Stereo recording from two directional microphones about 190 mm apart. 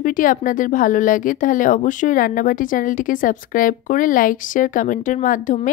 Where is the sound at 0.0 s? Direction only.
45° left (ahead or behind).